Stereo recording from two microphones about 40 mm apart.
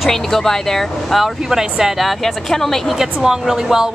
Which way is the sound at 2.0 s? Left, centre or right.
Centre.